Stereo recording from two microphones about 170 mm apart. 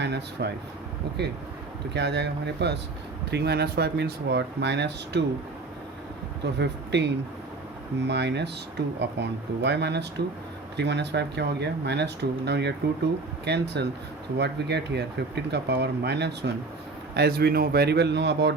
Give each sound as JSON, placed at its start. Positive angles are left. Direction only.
{"t": 0.0, "sound": "speech", "side_deg": -80}
{"t": 1.9, "sound": "speech", "side_deg": -90}
{"t": 6.4, "sound": "speech", "side_deg": -85}
{"t": 17.2, "sound": "a man's voice", "side_deg": -70}